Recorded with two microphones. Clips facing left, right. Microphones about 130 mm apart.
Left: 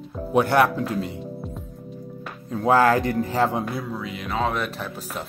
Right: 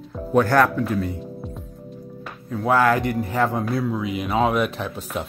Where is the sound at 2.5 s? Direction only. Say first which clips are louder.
Left 1 dB; 25° left (ahead or behind).